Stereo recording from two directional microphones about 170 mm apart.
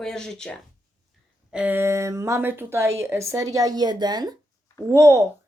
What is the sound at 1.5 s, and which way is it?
A woman's voice, 10° right (ahead or behind).